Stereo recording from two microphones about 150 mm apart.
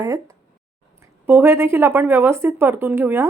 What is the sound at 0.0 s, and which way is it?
Speech, 20° right (ahead or behind).